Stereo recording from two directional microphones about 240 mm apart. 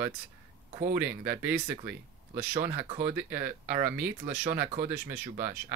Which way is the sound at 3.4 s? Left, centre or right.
Right.